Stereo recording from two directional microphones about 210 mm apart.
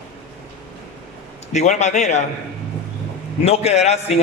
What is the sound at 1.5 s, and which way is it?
Speech, 35° left (ahead or behind).